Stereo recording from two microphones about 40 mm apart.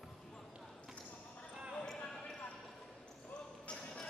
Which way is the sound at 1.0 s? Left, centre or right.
Left.